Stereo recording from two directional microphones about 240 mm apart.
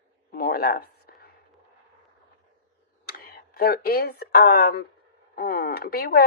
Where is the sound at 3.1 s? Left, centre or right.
Left.